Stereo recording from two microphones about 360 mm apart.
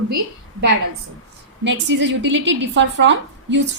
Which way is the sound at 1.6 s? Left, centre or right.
Right.